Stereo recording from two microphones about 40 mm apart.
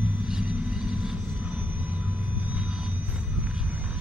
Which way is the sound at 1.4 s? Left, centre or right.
Right.